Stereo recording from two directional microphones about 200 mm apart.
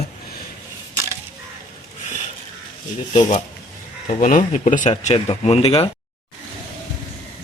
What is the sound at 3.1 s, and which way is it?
Speech, 40° left (ahead or behind).